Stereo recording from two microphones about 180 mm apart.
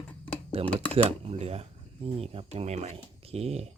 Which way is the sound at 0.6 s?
10° left (ahead or behind).